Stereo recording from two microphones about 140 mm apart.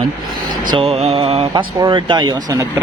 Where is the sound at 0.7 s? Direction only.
45° right (ahead or behind).